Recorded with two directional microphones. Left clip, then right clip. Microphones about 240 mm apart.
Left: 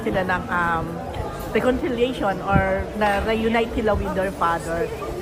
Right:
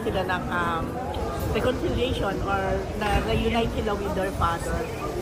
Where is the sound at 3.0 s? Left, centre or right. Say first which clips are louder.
Left 6 dB; left.